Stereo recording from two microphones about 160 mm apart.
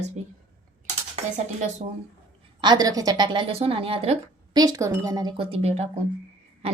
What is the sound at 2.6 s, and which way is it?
A woman's voice, 25° right (ahead or behind).